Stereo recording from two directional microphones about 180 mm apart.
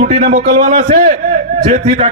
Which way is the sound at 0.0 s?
45° right (ahead or behind).